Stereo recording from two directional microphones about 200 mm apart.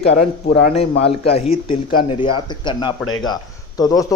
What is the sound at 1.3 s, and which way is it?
Speech, 30° left (ahead or behind).